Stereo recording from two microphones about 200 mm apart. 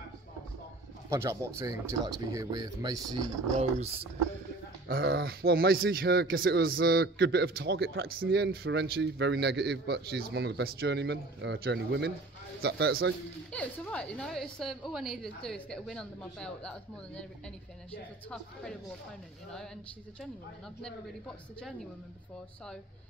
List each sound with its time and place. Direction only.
1.1 s speech: 15° right (ahead or behind)
3.5 s speech: 30° right (ahead or behind)
4.8 s a man's voice: 50° right (ahead or behind)
13.5 s a woman's voice: 5° left (ahead or behind)
18.3 s a woman's voice: 5° left (ahead or behind)